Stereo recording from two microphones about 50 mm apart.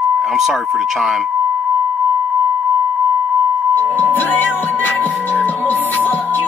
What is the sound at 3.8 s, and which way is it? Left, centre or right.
Music, left.